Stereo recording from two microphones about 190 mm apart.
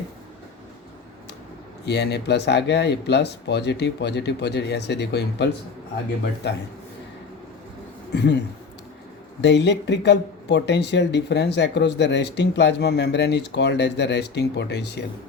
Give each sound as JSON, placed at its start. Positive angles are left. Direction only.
{"t": 1.8, "sound": "speech", "side_deg": 65}
{"t": 8.1, "sound": "speech", "side_deg": 65}
{"t": 9.4, "sound": "speech", "side_deg": 65}